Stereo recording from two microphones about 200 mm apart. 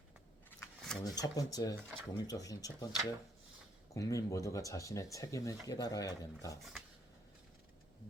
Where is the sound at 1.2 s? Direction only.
15° left (ahead or behind).